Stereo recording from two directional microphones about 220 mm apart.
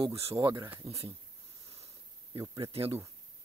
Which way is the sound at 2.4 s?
20° right (ahead or behind).